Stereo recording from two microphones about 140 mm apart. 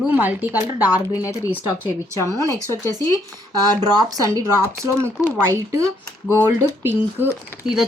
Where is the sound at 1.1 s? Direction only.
25° left (ahead or behind).